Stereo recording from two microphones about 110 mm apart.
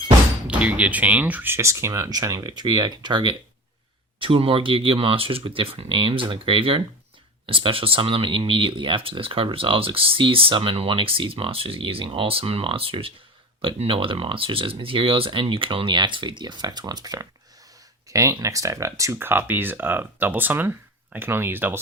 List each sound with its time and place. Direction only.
0.4 s speech: 10° right (ahead or behind); by 3.3 s 45° right (ahead or behind)
4.2 s speech: 55° right (ahead or behind); by 21.8 s 20° right (ahead or behind)